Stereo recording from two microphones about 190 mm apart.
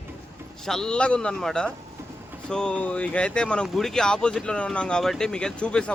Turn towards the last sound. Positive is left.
turn(degrees=5)  # may be behind; listen again after turning